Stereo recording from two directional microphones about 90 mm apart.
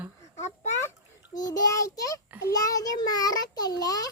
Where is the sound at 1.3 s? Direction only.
45° left (ahead or behind).